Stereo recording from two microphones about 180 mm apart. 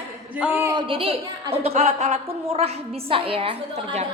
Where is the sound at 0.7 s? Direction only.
30° right (ahead or behind).